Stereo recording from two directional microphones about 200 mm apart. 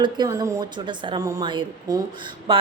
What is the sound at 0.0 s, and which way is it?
A woman's voice, 20° right (ahead or behind).